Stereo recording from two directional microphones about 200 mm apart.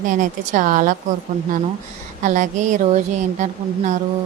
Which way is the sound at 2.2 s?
40° right (ahead or behind).